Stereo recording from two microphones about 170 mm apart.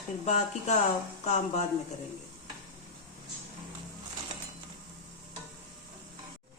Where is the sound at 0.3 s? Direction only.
40° left (ahead or behind).